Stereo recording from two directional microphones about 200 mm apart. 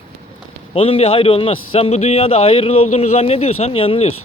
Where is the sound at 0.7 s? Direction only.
30° left (ahead or behind).